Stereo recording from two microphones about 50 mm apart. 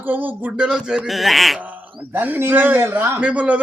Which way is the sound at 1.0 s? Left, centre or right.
Centre.